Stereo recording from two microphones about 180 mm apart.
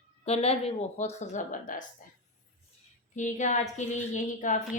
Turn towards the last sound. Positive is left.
turn(degrees=45)  # may be behind; listen again after turning